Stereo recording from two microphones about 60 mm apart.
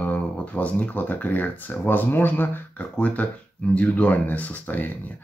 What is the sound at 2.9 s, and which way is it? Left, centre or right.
Speech, left.